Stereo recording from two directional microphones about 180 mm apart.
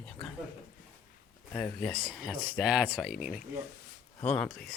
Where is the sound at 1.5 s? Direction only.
5° left (ahead or behind).